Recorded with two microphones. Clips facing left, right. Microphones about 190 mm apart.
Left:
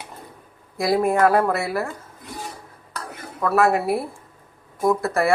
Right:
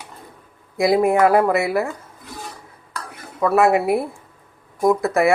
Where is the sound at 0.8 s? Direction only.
20° right (ahead or behind).